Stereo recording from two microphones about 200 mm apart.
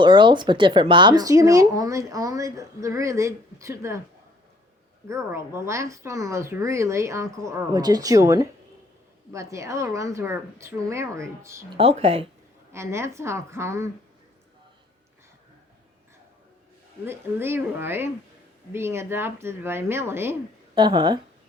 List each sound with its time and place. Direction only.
0.0 s speech: 25° right (ahead or behind)
5.0 s speech: 15° right (ahead or behind)
11.8 s speech: 30° right (ahead or behind)
12.7 s speech: 15° right (ahead or behind)
17.1 s speech: 10° right (ahead or behind)